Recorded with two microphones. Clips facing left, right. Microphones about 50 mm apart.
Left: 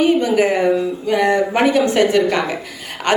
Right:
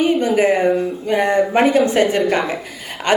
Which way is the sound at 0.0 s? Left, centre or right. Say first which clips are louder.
Left 1 dB; right.